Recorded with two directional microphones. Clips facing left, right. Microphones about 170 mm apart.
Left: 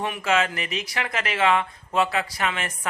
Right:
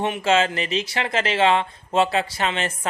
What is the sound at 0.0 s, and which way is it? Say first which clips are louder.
Speech: right 4 dB; 25° right (ahead or behind).